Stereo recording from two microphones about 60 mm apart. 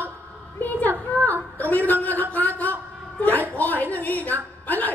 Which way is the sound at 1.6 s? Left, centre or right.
Left.